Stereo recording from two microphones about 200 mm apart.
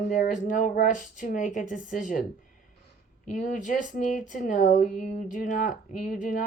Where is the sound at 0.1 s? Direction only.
40° left (ahead or behind).